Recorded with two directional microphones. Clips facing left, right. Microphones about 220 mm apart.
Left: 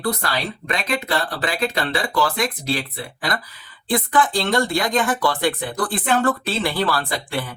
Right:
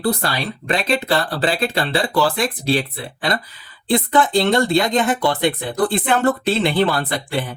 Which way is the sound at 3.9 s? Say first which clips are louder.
Right 3 dB; 25° right (ahead or behind).